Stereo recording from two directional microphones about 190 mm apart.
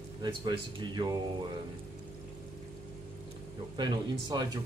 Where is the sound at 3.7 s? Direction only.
25° right (ahead or behind).